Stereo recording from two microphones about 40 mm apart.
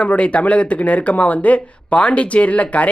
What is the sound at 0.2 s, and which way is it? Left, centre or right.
Speech, left.